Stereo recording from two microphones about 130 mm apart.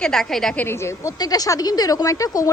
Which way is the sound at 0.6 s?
20° left (ahead or behind).